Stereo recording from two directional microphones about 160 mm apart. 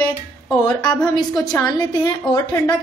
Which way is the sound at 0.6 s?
25° left (ahead or behind).